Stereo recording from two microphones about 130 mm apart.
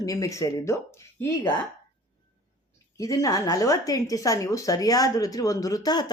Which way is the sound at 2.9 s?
25° left (ahead or behind).